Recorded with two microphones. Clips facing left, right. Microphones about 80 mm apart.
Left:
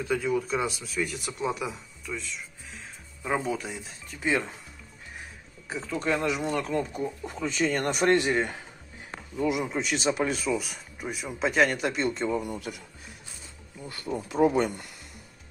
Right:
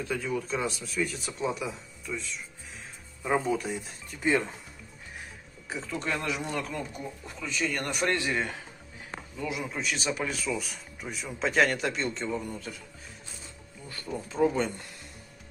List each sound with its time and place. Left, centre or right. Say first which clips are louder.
0.1 s speech: left 5 dB; centre
5.7 s speech: left 2 dB; centre
6.0 s speech: left 6 dB; left
6.5 s speech: left 5 dB; left
10.4 s speech: left 4 dB; centre
13.8 s speech: left 3 dB; centre